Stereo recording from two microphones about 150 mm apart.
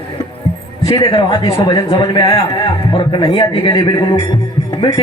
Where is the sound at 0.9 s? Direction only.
30° left (ahead or behind).